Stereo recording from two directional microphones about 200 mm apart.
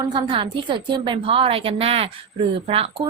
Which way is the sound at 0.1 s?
25° right (ahead or behind).